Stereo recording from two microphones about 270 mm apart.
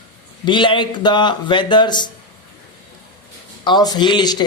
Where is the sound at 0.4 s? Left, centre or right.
Centre.